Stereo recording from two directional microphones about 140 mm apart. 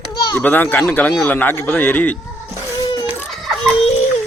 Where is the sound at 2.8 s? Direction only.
25° left (ahead or behind).